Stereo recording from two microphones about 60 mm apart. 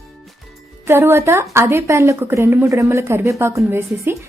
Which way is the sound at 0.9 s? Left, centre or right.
Right.